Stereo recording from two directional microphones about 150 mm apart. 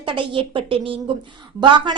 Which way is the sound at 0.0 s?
35° right (ahead or behind).